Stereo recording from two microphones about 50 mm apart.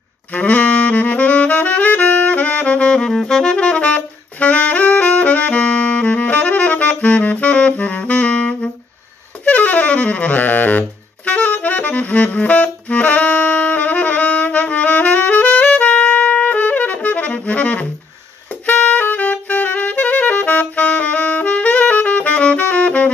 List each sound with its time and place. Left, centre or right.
0.3 s saxophone: left
3.1 s saxophone: centre
3.5 s saxophone: left
18.7 s music: left